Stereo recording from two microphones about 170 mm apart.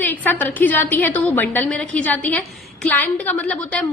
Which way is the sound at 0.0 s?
10° left (ahead or behind).